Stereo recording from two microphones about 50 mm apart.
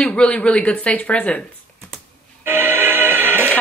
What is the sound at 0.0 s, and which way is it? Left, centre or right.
Speech, left.